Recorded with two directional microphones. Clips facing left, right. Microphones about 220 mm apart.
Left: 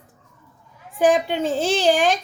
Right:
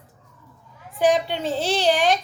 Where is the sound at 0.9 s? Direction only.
45° left (ahead or behind).